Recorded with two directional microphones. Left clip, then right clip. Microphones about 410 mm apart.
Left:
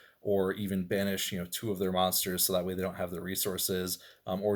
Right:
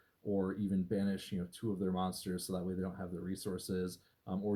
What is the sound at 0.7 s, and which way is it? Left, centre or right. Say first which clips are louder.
Speech: left 6 dB; left.